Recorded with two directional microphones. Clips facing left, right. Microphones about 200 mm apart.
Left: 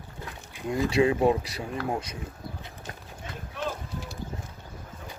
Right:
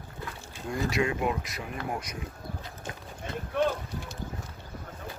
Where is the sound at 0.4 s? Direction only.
20° left (ahead or behind).